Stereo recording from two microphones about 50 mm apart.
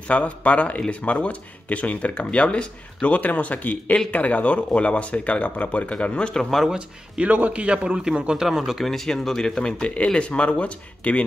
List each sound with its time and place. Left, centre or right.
0.1 s speech: left
7.2 s a man's voice: right; by 8.5 s centre
8.5 s speech: centre; by 11.2 s left